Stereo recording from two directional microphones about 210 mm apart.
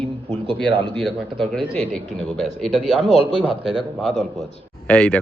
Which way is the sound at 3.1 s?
25° left (ahead or behind).